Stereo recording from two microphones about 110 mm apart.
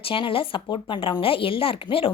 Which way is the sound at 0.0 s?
55° left (ahead or behind).